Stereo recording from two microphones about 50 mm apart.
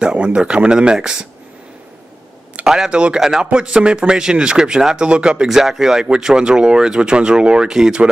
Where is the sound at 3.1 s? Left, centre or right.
Centre.